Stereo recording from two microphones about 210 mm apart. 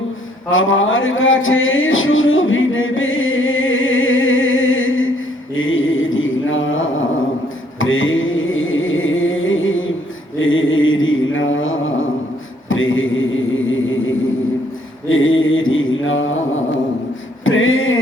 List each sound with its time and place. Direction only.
0.5 s music: 70° left (ahead or behind)
5.5 s mantra: 70° left (ahead or behind)
7.8 s carnatic music: 70° left (ahead or behind)
10.4 s mantra: 70° left (ahead or behind)
12.6 s a sound: 70° left (ahead or behind)
15.1 s mantra: 70° left (ahead or behind)
17.4 s a sound: 70° left (ahead or behind)